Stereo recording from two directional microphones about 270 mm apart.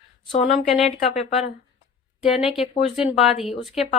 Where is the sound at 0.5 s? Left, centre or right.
Centre.